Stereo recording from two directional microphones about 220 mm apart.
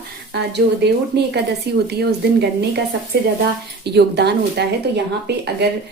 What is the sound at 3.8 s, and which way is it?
A woman's voice, 50° right (ahead or behind).